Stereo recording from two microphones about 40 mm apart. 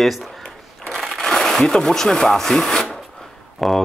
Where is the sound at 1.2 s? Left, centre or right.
Centre.